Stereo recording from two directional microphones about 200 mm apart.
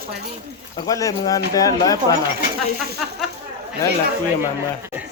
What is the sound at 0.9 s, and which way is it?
Speech, 15° left (ahead or behind).